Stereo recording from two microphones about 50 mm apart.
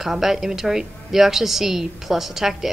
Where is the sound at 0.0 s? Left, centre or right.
Centre.